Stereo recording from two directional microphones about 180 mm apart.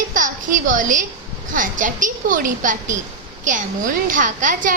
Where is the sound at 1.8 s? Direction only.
45° right (ahead or behind).